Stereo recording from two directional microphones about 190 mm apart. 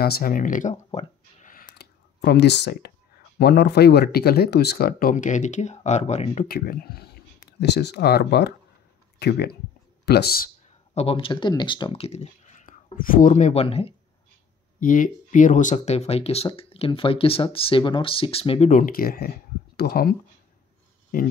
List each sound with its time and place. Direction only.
0.0 s a sound: 50° left (ahead or behind)
3.3 s speech: 60° left (ahead or behind); by 6.4 s 35° left (ahead or behind)
6.4 s speech: 50° left (ahead or behind)
11.0 s speech: 30° left (ahead or behind)
14.8 s speech: 45° left (ahead or behind)
18.7 s speech: 45° left (ahead or behind)